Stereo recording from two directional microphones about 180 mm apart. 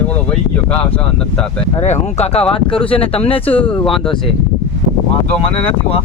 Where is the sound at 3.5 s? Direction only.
5° left (ahead or behind).